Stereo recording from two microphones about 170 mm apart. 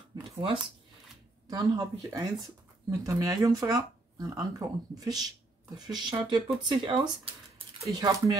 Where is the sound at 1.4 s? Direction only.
20° right (ahead or behind).